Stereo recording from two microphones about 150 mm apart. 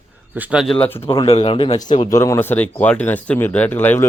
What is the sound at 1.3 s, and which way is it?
Speech, 40° left (ahead or behind).